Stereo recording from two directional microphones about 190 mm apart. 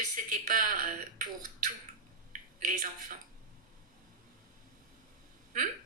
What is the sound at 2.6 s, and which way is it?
Speech, 45° right (ahead or behind).